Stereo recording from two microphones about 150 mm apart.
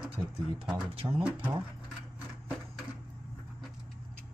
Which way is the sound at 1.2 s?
10° right (ahead or behind).